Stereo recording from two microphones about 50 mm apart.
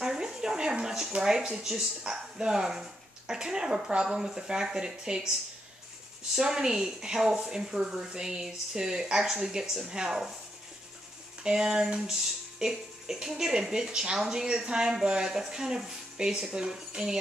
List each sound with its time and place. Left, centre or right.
0.0 s speech: centre
6.3 s speech: centre
11.4 s speech: centre